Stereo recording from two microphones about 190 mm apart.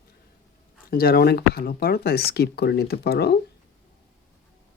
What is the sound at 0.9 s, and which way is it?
Speech, 55° left (ahead or behind).